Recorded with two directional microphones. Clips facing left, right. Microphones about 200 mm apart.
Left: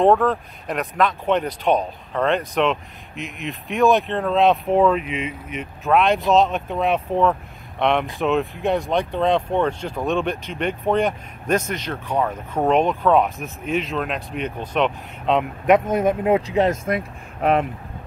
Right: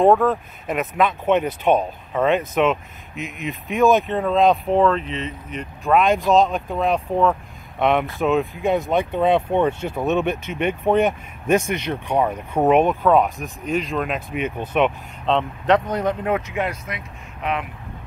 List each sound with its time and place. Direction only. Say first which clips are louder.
0.0 s speech: right 1 dB; centre (ahead or behind)
15.2 s speech: left 1 dB; 5° left (ahead or behind)
15.7 s speech: left 2 dB; 25° left (ahead or behind); by 17.6 s 40° left (ahead or behind)